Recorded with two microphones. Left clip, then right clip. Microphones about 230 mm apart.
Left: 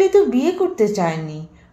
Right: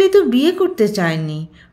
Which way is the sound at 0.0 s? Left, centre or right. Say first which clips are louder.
Right 2 dB; right.